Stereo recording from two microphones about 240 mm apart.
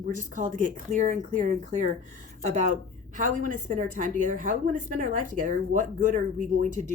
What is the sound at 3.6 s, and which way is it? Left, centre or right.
Speech, right.